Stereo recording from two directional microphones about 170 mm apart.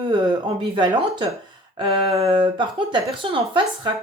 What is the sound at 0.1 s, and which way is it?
A woman's voice, 30° right (ahead or behind).